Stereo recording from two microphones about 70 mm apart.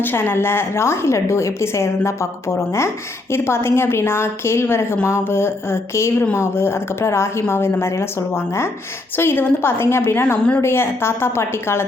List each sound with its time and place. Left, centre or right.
0.0 s a woman's voice: left
3.3 s a woman's voice: left